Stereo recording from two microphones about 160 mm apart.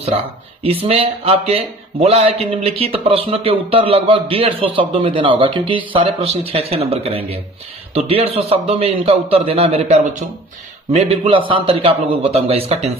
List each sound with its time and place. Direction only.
0.6 s a man's voice: 35° right (ahead or behind)